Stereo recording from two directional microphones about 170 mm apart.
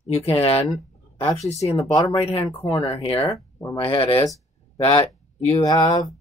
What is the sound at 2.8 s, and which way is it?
Speech, 35° left (ahead or behind).